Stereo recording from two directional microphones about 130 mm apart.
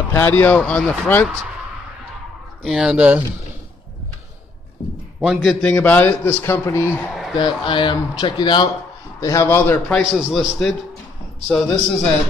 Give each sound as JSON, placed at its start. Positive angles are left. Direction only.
{"t": 0.1, "sound": "a man's voice", "side_deg": 15}
{"t": 2.6, "sound": "speech", "side_deg": -5}
{"t": 4.8, "sound": "speech", "side_deg": 50}
{"t": 5.2, "sound": "a man's voice", "side_deg": 0}
{"t": 7.3, "sound": "speech", "side_deg": 35}
{"t": 9.2, "sound": "a man's voice", "side_deg": 20}
{"t": 9.8, "sound": "a man's voice", "side_deg": 0}